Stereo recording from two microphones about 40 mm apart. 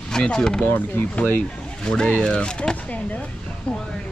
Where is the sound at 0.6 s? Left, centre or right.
Left.